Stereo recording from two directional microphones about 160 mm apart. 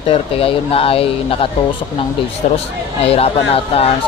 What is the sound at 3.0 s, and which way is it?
Speech, 40° left (ahead or behind).